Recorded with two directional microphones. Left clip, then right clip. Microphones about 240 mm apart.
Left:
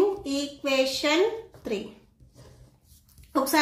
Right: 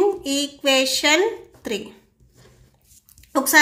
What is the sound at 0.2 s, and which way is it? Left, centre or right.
A woman's voice, right.